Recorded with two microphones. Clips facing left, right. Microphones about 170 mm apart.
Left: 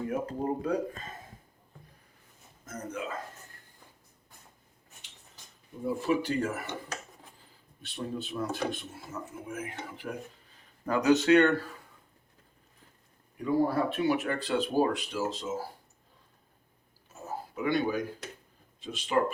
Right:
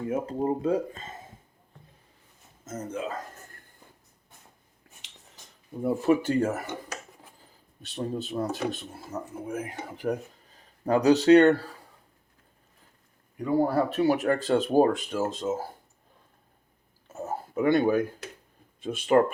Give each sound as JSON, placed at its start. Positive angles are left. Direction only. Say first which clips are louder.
{"t": 0.1, "sound": "speech", "louder": "right 7 dB", "side_deg": -25}
{"t": 2.6, "sound": "speech", "louder": "right 4 dB", "side_deg": -25}
{"t": 5.8, "sound": "speech", "louder": "right 5 dB", "side_deg": -45}
{"t": 7.8, "sound": "speech", "louder": "right 4 dB", "side_deg": -40}
{"t": 13.4, "sound": "speech", "louder": "right 3 dB", "side_deg": -40}
{"t": 17.1, "sound": "a sound", "louder": "right 5 dB", "side_deg": -50}
{"t": 18.8, "sound": "speech", "louder": "right 7 dB", "side_deg": -55}